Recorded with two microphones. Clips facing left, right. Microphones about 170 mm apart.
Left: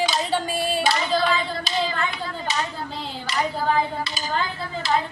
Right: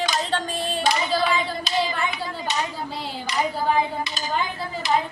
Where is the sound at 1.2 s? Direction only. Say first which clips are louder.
Even; 15° right (ahead or behind).